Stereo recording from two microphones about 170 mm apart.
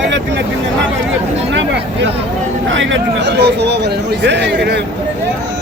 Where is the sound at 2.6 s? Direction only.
90° right.